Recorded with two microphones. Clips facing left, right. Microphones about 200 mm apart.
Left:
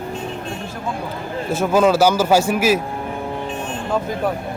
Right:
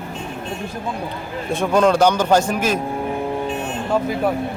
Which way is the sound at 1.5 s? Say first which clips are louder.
Left 1 dB; 5° left (ahead or behind).